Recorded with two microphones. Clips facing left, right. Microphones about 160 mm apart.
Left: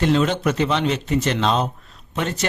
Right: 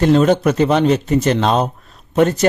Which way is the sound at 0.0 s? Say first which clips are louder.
Right 6 dB; 45° right (ahead or behind).